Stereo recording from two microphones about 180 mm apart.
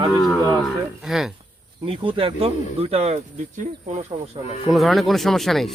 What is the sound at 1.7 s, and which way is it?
Speech, 30° right (ahead or behind).